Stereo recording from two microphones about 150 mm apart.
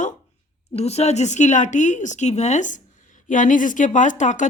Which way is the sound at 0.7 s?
45° left (ahead or behind).